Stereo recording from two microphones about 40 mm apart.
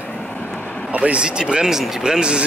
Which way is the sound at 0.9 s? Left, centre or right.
Right.